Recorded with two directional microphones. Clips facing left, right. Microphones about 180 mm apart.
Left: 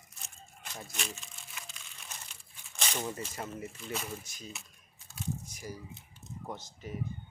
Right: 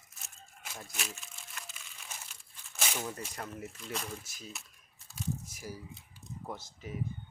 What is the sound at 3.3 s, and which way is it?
Speech, centre (ahead or behind).